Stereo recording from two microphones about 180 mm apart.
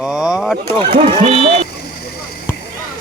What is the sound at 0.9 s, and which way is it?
Speech, 35° right (ahead or behind).